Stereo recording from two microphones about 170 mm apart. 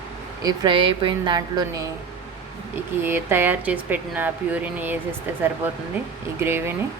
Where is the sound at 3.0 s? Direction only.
15° right (ahead or behind).